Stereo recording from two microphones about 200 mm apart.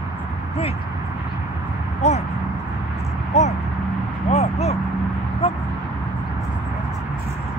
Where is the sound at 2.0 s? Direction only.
35° left (ahead or behind).